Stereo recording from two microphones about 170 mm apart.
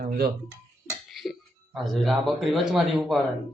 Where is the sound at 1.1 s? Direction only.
Centre (ahead or behind).